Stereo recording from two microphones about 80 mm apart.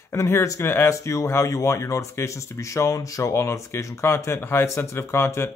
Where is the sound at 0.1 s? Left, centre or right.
Left.